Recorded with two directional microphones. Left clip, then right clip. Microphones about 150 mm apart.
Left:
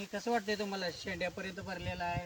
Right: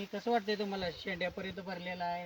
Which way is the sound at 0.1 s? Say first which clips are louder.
Right 1 dB; 15° left (ahead or behind).